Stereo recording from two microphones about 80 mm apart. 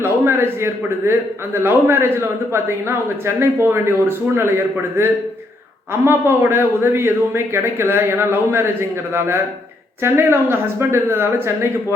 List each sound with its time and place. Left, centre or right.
0.0 s a man's voice: right